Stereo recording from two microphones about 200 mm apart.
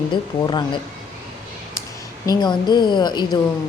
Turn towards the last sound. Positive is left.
turn(degrees=20)  # may be behind; listen again after turning